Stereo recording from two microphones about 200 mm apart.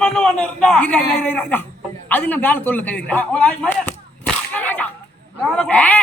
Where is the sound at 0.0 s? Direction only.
5° left (ahead or behind).